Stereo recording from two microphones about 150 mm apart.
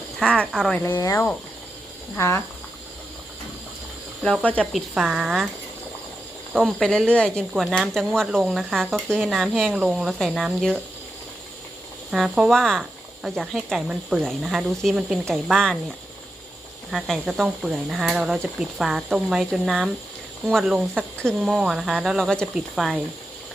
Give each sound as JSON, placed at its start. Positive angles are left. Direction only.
{"t": 0.2, "sound": "speech", "side_deg": 5}
{"t": 0.8, "sound": "speech", "side_deg": 25}
{"t": 4.2, "sound": "speech", "side_deg": 5}
{"t": 6.5, "sound": "speech", "side_deg": 0}
{"t": 12.1, "sound": "speech", "side_deg": 0}
{"t": 16.9, "sound": "speech", "side_deg": 0}